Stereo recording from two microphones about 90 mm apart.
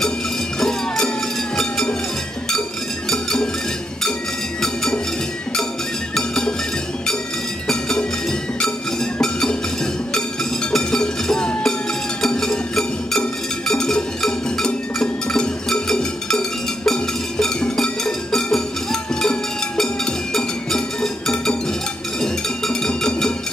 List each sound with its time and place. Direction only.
0.6 s cowbell: 5° left (ahead or behind)
3.1 s cowbell: 5° left (ahead or behind)
6.1 s music: 5° left (ahead or behind)
7.6 s music: 5° left (ahead or behind)
10.7 s music: 10° left (ahead or behind)
19.8 s cowbell: 5° left (ahead or behind)